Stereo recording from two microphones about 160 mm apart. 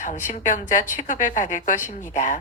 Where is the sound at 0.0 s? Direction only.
50° left (ahead or behind).